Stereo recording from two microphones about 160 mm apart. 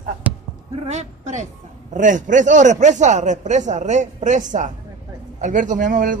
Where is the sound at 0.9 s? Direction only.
45° right (ahead or behind).